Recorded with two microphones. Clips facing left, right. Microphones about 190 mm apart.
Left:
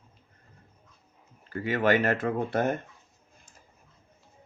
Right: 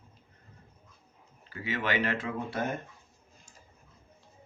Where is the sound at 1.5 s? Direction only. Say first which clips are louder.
Left 8 dB; 50° left (ahead or behind).